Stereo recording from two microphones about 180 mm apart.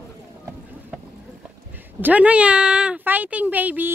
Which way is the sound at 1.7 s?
10° right (ahead or behind).